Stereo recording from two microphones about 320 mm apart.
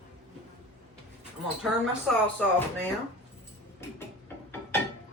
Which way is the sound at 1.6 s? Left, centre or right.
Centre.